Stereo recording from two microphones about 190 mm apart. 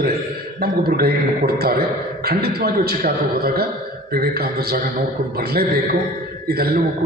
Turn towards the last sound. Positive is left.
turn(degrees=-55)  # may be behind; listen again after turning